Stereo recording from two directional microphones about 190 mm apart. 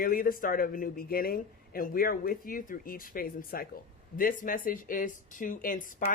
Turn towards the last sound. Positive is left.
turn(degrees=45)  # may be behind; listen again after turning